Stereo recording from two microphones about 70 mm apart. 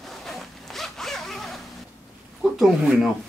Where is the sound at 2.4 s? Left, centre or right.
Centre.